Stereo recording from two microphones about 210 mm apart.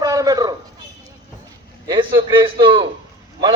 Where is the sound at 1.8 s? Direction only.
25° right (ahead or behind).